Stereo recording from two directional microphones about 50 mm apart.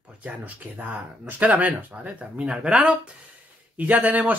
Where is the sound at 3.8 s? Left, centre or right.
Right.